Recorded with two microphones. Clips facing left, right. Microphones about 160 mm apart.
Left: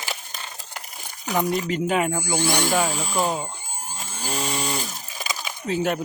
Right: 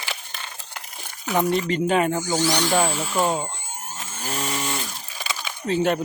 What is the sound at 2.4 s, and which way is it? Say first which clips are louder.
Speech: even; 55° left (ahead or behind).